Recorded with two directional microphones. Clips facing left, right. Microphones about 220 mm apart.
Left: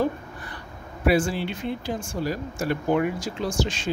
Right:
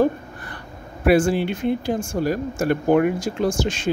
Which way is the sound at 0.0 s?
50° right (ahead or behind).